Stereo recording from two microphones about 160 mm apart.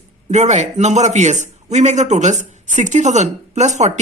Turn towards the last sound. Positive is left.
turn(degrees=-45)  # may be behind; listen again after turning